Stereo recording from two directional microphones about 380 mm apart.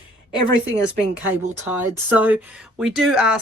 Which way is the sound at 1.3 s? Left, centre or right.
Centre.